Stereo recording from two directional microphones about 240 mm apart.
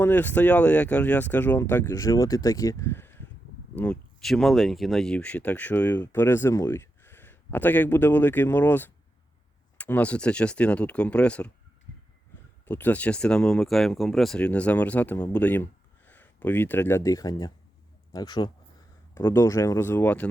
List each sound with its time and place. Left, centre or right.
0.0 s speech: centre
12.6 s speech: centre